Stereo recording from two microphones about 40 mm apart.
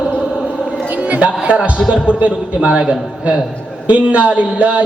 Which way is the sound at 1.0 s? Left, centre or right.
Right.